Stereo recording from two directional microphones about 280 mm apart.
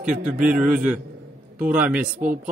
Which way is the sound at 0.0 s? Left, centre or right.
Centre.